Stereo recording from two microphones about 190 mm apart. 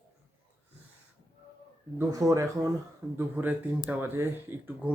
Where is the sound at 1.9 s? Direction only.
15° right (ahead or behind).